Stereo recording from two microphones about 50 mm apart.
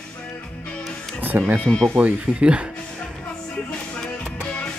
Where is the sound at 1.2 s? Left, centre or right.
Right.